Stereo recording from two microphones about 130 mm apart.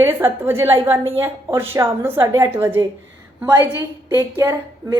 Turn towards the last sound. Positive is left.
turn(degrees=-25)  # may be behind; listen again after turning